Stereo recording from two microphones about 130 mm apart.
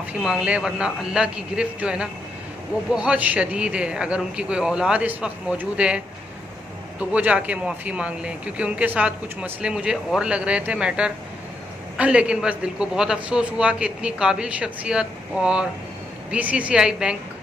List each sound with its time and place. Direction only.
0.1 s speech: 5° right (ahead or behind)